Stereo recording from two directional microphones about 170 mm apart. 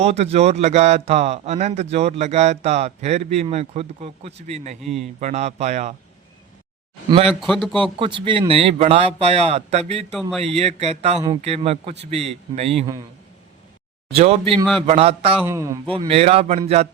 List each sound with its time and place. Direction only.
0.0 s a man's voice: 35° right (ahead or behind)
4.8 s a man's voice: centre (ahead or behind)
5.2 s a man's voice: 40° right (ahead or behind)
7.3 s a man's voice: centre (ahead or behind)
7.8 s a man's voice: 30° right (ahead or behind)
14.1 s a man's voice: 35° right (ahead or behind)
15.4 s a man's voice: 20° right (ahead or behind)
15.9 s a man's voice: 35° right (ahead or behind)